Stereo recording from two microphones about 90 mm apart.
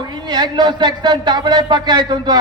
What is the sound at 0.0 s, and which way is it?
A man's voice, 55° right (ahead or behind).